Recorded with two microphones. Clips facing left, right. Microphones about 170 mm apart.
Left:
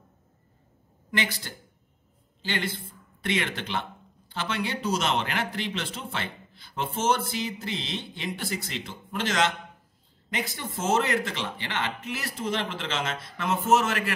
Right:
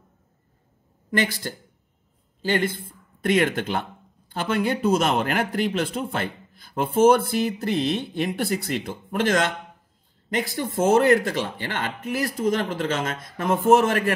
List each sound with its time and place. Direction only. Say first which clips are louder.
1.1 s a man's voice: right 6 dB; 50° right (ahead or behind)
10.5 s a man's voice: right 7 dB; 55° right (ahead or behind)